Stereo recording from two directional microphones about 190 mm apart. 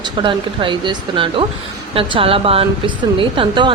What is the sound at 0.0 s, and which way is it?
A woman's voice, 25° right (ahead or behind).